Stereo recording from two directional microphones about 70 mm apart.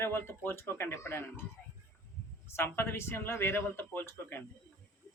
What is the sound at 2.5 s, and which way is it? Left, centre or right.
Speech, left.